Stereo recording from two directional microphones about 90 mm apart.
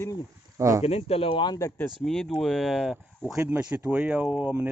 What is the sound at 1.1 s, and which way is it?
Speech, 90° left.